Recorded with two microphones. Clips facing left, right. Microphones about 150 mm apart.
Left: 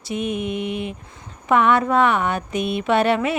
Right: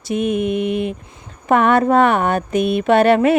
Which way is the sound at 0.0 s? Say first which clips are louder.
Right 6 dB; 50° right (ahead or behind).